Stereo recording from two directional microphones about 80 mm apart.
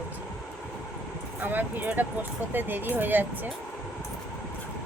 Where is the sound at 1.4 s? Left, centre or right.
Right.